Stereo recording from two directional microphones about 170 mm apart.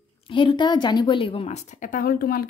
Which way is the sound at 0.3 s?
30° left (ahead or behind).